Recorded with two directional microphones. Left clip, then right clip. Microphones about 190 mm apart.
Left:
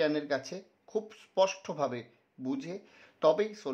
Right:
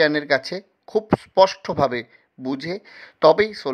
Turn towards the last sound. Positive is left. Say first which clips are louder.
# right 12 dB
turn(degrees=-25)  # may be behind; listen again after turning